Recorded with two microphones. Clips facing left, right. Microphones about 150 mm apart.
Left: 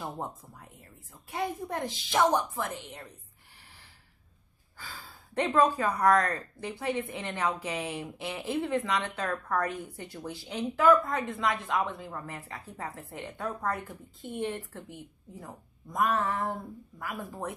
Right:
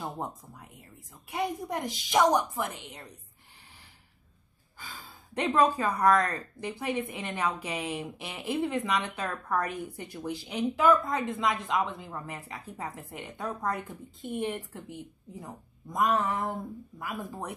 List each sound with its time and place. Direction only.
1.3 s speech: 15° right (ahead or behind)
4.7 s speech: 15° right (ahead or behind)